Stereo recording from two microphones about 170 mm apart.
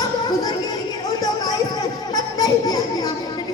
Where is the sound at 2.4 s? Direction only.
20° left (ahead or behind).